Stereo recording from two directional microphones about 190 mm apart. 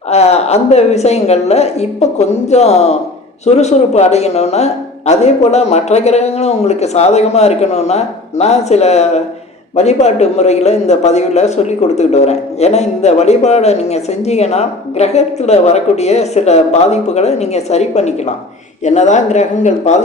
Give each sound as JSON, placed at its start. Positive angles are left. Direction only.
{"t": 0.1, "sound": "a man's voice", "side_deg": 35}